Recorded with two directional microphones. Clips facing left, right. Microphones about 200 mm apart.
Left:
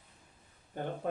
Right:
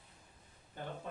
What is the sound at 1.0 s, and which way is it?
Speech, 55° left (ahead or behind).